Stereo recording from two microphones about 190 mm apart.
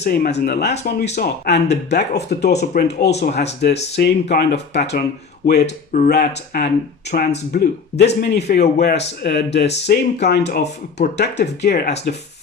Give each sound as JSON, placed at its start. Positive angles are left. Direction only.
{"t": 0.0, "sound": "speech", "side_deg": 60}